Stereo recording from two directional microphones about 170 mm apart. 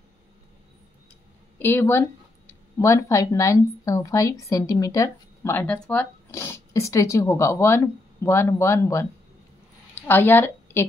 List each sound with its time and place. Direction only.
1.6 s speech: 15° left (ahead or behind)